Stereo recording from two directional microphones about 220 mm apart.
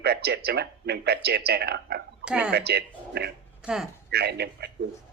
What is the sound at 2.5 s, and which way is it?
Speech, 45° right (ahead or behind).